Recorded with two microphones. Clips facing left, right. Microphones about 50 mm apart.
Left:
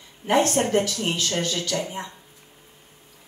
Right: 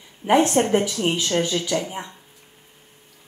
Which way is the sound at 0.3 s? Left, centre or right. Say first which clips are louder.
Right 3 dB; centre.